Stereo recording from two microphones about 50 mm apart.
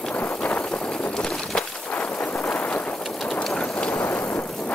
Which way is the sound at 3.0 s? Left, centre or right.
Centre.